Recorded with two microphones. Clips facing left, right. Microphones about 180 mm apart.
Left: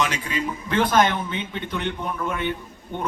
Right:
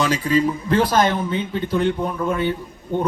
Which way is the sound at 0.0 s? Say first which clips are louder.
Right 7 dB; 35° right (ahead or behind).